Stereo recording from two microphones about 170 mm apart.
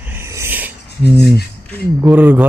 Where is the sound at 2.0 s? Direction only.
10° right (ahead or behind).